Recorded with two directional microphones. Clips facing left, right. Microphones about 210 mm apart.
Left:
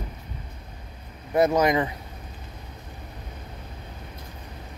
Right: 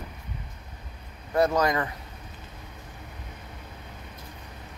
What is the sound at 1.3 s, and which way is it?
Speech, 20° left (ahead or behind).